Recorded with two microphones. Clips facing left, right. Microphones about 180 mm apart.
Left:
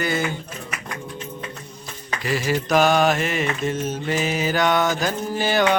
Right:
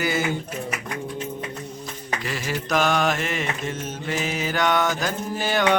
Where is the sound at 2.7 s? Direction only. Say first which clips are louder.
Left 4 dB; 35° left (ahead or behind).